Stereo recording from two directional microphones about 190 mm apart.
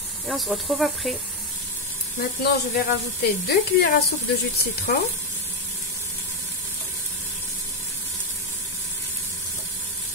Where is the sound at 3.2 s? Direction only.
60° left (ahead or behind).